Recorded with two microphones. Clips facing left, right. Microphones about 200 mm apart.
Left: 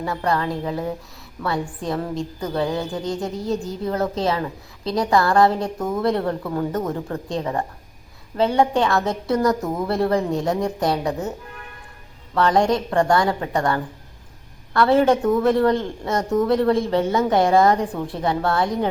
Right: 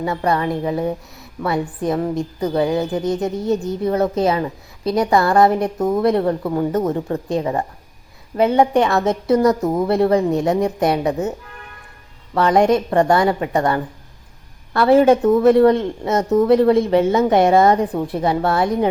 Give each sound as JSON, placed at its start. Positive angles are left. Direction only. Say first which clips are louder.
{"t": 0.0, "sound": "a woman's voice", "louder": "right 3 dB", "side_deg": -20}
{"t": 12.3, "sound": "a woman's voice", "louder": "right 4 dB", "side_deg": -20}